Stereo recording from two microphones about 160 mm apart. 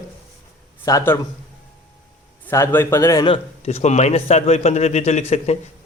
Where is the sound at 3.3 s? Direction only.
40° left (ahead or behind).